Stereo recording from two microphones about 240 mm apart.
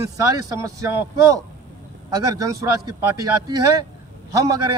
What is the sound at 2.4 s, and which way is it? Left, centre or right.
Speech, centre.